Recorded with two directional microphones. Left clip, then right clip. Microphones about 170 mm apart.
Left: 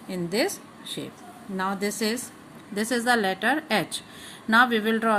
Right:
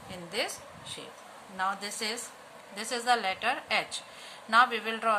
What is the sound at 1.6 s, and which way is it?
A woman's voice, 35° left (ahead or behind).